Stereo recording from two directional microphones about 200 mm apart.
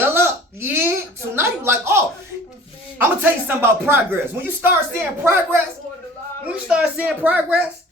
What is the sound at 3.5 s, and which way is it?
Speech, 10° right (ahead or behind).